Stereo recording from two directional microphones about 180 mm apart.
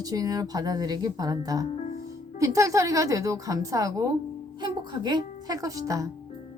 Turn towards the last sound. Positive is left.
turn(degrees=-20)  # may be behind; listen again after turning